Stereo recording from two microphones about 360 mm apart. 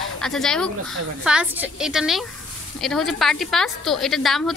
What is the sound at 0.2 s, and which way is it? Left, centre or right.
A woman's voice, centre.